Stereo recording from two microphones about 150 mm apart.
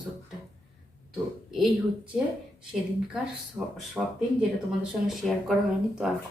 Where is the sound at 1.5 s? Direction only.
Centre (ahead or behind).